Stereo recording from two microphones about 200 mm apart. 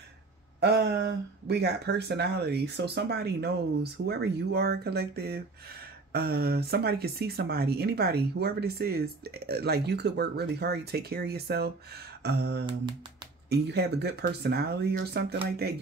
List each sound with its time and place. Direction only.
0.6 s speech: 55° right (ahead or behind)
12.2 s a sound: 55° right (ahead or behind)
13.5 s speech: 55° right (ahead or behind)